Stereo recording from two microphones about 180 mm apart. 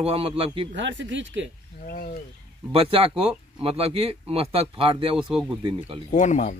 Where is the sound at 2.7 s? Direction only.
30° right (ahead or behind).